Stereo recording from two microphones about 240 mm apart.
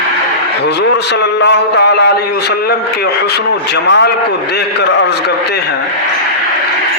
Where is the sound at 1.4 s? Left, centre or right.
Left.